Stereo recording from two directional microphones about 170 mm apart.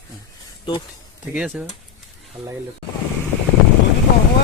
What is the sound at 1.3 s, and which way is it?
Speech, 5° right (ahead or behind).